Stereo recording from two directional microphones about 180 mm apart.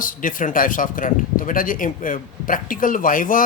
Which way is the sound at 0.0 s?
50° left (ahead or behind).